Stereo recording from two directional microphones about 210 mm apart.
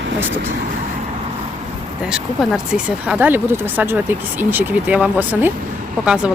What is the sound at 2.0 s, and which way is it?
Speech, centre (ahead or behind).